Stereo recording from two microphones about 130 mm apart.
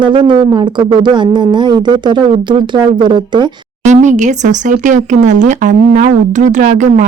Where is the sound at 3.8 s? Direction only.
65° right (ahead or behind).